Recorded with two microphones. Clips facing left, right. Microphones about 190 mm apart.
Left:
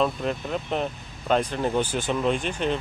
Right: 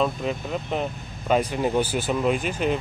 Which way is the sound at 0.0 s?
5° right (ahead or behind).